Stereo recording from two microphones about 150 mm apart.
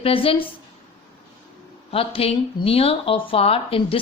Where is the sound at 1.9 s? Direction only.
40° left (ahead or behind).